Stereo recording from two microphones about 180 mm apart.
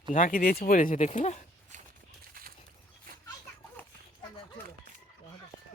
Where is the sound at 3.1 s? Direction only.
55° right (ahead or behind).